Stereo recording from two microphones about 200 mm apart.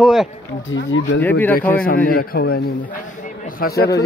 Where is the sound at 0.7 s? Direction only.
65° left (ahead or behind).